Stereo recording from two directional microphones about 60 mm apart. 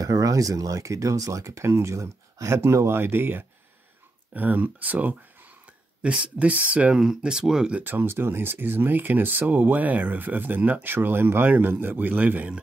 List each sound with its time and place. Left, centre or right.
0.0 s speech: right; by 7.8 s centre
7.8 s speech: right